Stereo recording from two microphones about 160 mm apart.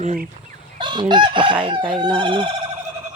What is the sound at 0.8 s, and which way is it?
Chicken, 30° right (ahead or behind).